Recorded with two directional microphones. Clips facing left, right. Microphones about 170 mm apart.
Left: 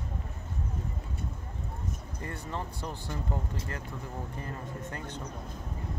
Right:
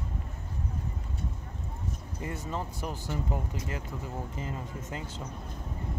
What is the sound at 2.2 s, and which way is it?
Speech, 15° right (ahead or behind).